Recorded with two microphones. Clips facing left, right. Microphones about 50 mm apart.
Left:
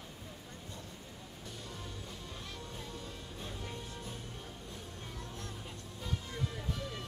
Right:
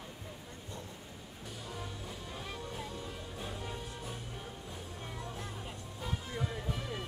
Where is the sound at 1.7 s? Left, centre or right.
Centre.